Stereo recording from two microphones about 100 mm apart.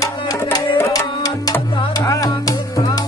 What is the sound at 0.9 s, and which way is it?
Music, 40° left (ahead or behind).